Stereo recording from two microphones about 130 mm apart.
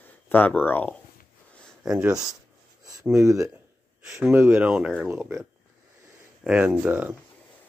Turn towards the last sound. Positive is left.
turn(degrees=-15)  # may be behind; listen again after turning